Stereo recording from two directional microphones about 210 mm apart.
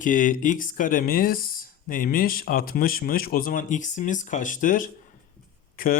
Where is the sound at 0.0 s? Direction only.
40° left (ahead or behind).